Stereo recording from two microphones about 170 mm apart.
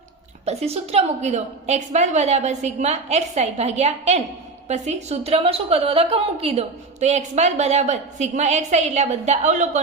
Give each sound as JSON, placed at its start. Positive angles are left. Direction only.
{"t": 0.4, "sound": "a woman's voice", "side_deg": -35}